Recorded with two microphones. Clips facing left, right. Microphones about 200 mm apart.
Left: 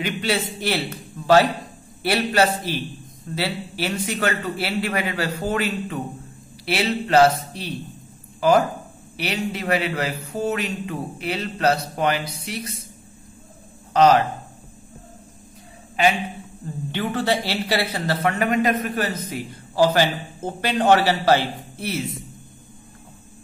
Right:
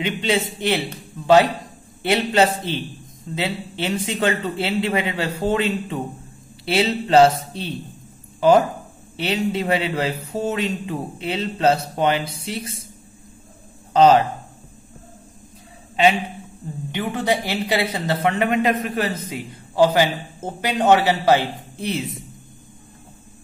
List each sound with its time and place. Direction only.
0.0 s a woman's voice: 20° right (ahead or behind)
13.9 s a woman's voice: 25° right (ahead or behind)
16.9 s a woman's voice: 15° right (ahead or behind)